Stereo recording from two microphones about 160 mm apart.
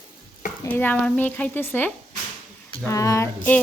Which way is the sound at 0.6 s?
10° left (ahead or behind).